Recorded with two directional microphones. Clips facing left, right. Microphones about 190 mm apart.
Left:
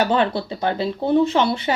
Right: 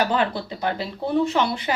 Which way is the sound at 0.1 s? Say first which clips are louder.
Left 3 dB; 25° left (ahead or behind).